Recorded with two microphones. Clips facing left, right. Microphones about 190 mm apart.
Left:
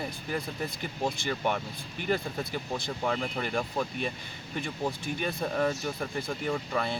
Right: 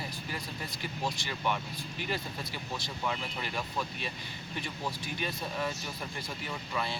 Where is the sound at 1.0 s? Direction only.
50° left (ahead or behind).